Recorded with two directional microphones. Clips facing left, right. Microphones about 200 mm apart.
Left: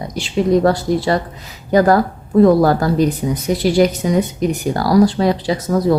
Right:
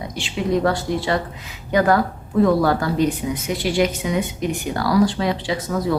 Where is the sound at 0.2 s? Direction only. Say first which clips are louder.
Left 6 dB; 40° left (ahead or behind).